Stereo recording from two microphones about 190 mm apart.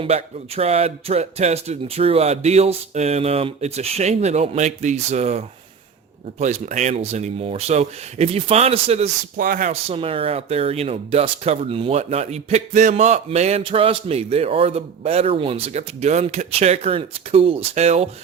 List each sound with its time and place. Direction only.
0.0 s speech: 30° right (ahead or behind)
9.4 s speech: 45° right (ahead or behind)
9.9 s speech: 30° right (ahead or behind)